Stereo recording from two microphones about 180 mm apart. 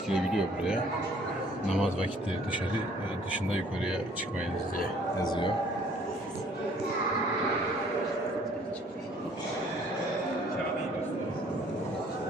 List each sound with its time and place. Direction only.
0.1 s speech: 5° right (ahead or behind)
5.2 s speech: 25° left (ahead or behind)